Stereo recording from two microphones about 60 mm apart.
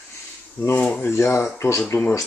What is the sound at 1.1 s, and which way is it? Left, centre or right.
Speech, left.